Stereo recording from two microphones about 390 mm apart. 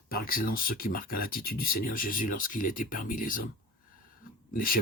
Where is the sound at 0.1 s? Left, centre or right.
Left.